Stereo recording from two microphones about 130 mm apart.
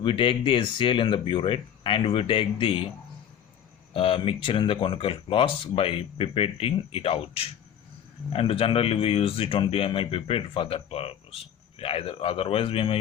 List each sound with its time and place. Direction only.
0.0 s speech: 40° left (ahead or behind)
3.9 s speech: 45° left (ahead or behind)